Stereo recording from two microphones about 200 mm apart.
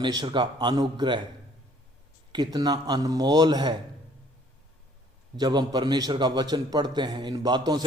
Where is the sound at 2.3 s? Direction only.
20° right (ahead or behind).